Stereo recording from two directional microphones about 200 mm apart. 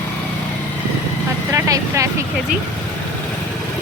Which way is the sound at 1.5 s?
15° right (ahead or behind).